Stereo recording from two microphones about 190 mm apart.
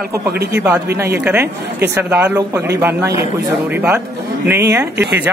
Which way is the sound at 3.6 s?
10° right (ahead or behind).